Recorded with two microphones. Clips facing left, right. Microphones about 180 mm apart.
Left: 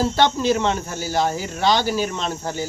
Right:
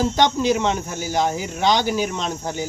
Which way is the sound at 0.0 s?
15° right (ahead or behind).